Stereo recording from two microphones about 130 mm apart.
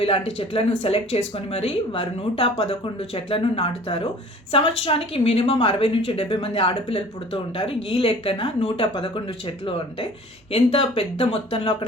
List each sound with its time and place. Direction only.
0.0 s speech: 45° left (ahead or behind)
10.5 s speech: 45° left (ahead or behind)